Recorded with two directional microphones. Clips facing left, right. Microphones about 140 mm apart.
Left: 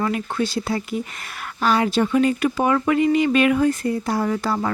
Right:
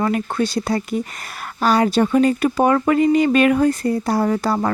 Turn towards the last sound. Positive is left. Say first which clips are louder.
# right 3 dB
turn(degrees=-40)  # may be behind; listen again after turning